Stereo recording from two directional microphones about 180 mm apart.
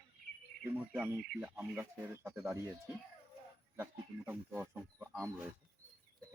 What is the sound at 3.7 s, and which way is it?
Speech, 10° right (ahead or behind).